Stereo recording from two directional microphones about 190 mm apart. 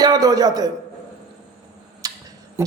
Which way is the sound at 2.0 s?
20° right (ahead or behind).